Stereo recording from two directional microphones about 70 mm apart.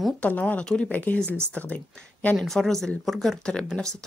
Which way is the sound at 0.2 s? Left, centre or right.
Left.